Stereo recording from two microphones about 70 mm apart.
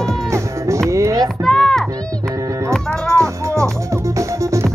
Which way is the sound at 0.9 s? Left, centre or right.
Right.